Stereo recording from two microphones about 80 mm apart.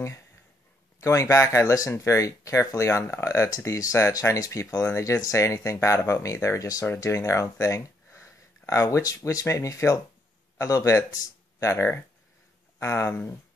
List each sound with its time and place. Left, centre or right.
1.0 s speech: left